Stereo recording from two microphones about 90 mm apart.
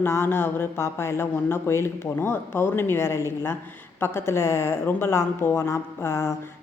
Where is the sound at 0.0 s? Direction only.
25° left (ahead or behind).